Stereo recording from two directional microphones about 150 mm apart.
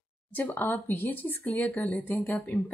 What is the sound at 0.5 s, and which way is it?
A woman's voice, 15° left (ahead or behind).